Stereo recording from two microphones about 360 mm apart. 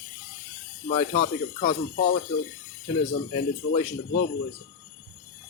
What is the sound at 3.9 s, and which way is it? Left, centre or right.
Speech, left.